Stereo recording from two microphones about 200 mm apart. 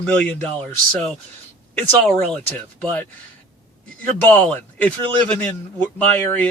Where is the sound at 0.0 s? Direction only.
5° left (ahead or behind).